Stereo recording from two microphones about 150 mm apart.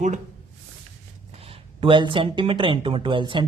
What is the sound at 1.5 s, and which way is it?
Speech, 35° right (ahead or behind).